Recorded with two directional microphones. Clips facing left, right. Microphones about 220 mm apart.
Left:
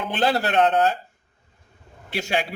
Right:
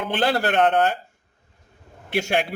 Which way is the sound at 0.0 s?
55° right (ahead or behind).